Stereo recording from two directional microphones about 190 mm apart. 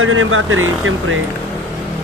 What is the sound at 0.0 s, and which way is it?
Speech, 90° right.